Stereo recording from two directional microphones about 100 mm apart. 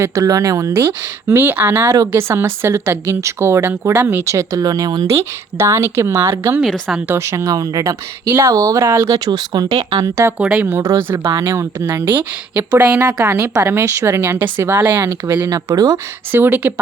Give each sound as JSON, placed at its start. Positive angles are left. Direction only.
{"t": 0.0, "sound": "speech", "side_deg": -35}
{"t": 5.0, "sound": "speech", "side_deg": -30}
{"t": 8.3, "sound": "speech", "side_deg": -25}
{"t": 8.5, "sound": "speech", "side_deg": -35}
{"t": 9.1, "sound": "speech", "side_deg": -45}
{"t": 10.0, "sound": "speech", "side_deg": -30}
{"t": 10.3, "sound": "speech", "side_deg": -5}
{"t": 10.6, "sound": "speech", "side_deg": -20}
{"t": 11.3, "sound": "speech", "side_deg": -30}
{"t": 13.2, "sound": "speech", "side_deg": -30}
{"t": 16.3, "sound": "speech", "side_deg": -20}